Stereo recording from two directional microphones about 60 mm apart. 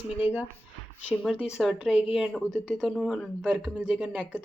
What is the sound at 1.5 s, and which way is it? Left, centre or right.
Speech, centre.